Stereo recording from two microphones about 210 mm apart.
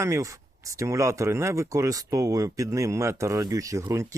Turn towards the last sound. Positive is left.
turn(degrees=-15)  # may be behind; listen again after turning